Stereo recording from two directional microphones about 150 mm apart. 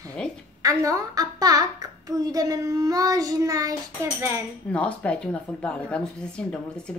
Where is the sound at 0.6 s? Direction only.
25° right (ahead or behind).